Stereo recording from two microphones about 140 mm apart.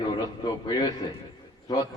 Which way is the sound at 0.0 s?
30° left (ahead or behind).